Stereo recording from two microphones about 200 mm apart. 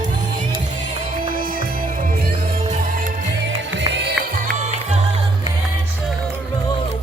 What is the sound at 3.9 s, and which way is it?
Music, 55° right (ahead or behind).